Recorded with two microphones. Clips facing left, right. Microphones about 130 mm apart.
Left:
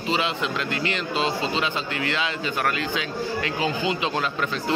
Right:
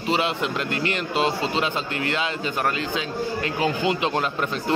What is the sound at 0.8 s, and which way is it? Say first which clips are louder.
Speech: right 3 dB; 50° right (ahead or behind).